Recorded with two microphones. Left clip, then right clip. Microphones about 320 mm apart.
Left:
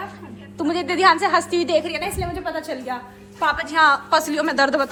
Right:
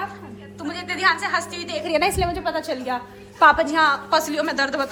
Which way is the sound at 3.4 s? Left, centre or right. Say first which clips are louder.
Right 7 dB; right.